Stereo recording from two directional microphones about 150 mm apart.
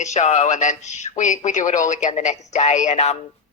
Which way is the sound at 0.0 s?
50° left (ahead or behind).